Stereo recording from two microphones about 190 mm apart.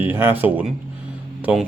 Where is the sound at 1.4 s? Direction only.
5° right (ahead or behind).